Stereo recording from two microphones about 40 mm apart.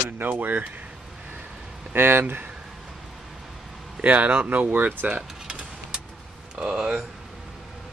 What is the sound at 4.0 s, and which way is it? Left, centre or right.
Speech, right.